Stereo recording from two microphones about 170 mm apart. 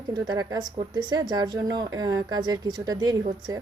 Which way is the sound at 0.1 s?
25° right (ahead or behind).